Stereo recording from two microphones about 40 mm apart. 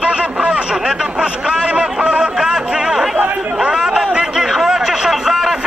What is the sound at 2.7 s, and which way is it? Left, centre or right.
Chatter, centre.